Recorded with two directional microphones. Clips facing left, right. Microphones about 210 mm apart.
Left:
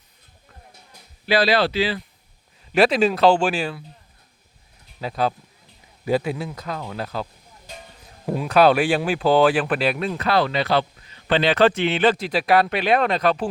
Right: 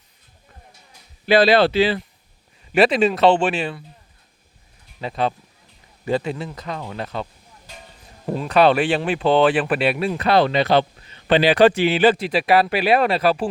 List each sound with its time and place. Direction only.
1.3 s speech: 25° right (ahead or behind)
2.7 s speech: centre (ahead or behind)
4.9 s speech: centre (ahead or behind)
8.3 s speech: 5° left (ahead or behind)